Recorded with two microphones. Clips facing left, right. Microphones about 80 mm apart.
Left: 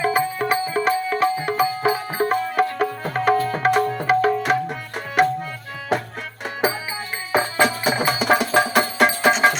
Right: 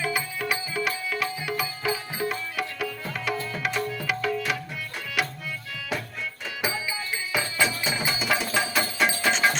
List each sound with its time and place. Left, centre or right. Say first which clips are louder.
0.0 s music: left 8 dB; left
7.3 s music: left 8 dB; left
7.9 s music: left 8 dB; left
9.3 s music: left 7 dB; left